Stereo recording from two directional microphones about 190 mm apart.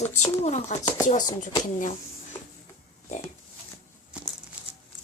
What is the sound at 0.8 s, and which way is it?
Speech, 20° left (ahead or behind).